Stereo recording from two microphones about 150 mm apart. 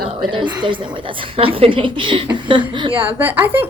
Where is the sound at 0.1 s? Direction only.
35° right (ahead or behind).